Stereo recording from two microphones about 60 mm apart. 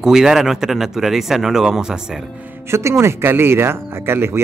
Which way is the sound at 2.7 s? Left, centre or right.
Right.